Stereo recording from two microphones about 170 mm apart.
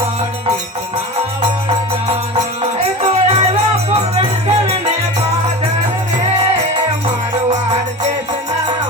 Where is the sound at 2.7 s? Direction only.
40° right (ahead or behind).